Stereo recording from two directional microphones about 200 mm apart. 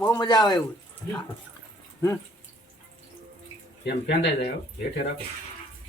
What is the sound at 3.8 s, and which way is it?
Speech, 55° left (ahead or behind).